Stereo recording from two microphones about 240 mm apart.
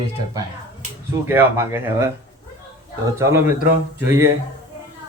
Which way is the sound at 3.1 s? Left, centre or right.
Centre.